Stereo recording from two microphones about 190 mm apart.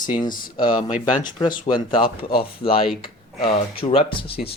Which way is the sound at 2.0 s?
55° left (ahead or behind).